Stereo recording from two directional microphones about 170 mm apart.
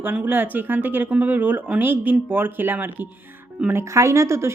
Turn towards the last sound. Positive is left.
turn(degrees=-15)  # may be behind; listen again after turning